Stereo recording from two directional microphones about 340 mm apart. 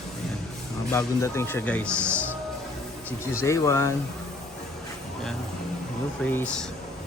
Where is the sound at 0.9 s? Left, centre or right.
Centre.